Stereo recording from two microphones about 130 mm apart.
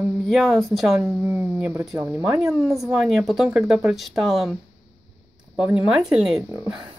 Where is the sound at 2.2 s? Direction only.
5° right (ahead or behind).